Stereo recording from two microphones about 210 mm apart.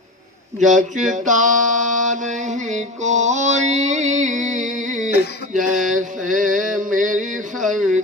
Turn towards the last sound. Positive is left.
turn(degrees=-35)  # may be behind; listen again after turning